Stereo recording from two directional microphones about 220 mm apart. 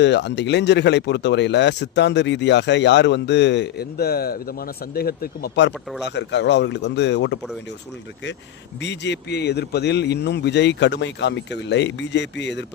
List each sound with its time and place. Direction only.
0.0 s speech: 50° left (ahead or behind)
8.8 s speech: 55° left (ahead or behind)